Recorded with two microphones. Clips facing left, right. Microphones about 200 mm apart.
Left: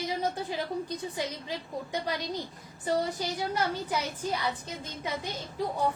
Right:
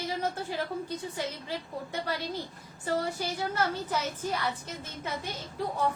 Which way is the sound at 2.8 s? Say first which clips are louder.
Left 1 dB; 15° left (ahead or behind).